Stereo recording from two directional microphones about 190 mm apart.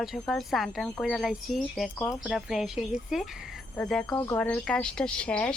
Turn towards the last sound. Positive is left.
turn(degrees=5)  # may be behind; listen again after turning